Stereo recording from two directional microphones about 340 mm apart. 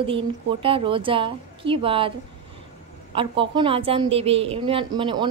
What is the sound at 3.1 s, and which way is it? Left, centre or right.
A woman's voice, centre.